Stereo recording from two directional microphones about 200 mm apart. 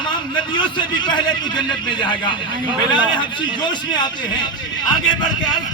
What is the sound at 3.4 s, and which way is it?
A man's voice, 20° left (ahead or behind).